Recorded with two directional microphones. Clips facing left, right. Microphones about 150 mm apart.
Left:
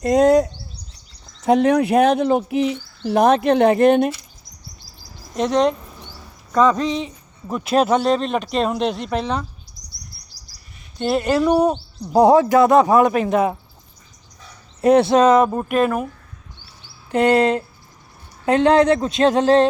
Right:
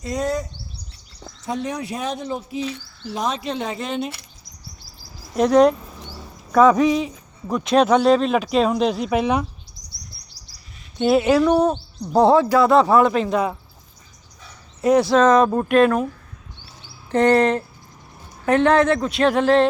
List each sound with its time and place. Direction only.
0.0 s speech: 65° left (ahead or behind)
5.3 s a sound: 5° right (ahead or behind)
6.5 s speech: 10° right (ahead or behind)
10.3 s chirp: 25° right (ahead or behind)
10.9 s speech: centre (ahead or behind)
11.4 s speech: 10° left (ahead or behind)
14.8 s speech: 60° left (ahead or behind)
15.0 s speech: 15° left (ahead or behind)
17.1 s speech: 10° left (ahead or behind)